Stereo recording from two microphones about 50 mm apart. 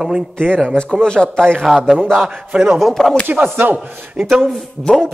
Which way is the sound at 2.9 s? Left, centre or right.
Centre.